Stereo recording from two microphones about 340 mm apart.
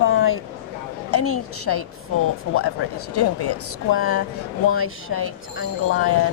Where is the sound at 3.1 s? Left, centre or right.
Left.